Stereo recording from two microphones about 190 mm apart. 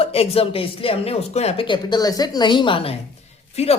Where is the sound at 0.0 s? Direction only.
30° left (ahead or behind).